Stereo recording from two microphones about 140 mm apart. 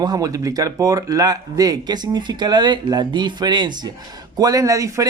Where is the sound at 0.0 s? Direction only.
25° right (ahead or behind).